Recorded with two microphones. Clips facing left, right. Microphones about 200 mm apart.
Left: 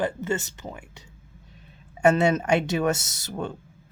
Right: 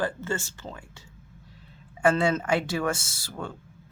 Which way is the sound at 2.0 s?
20° left (ahead or behind).